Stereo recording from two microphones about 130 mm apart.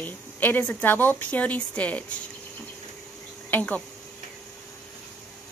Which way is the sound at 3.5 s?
10° left (ahead or behind).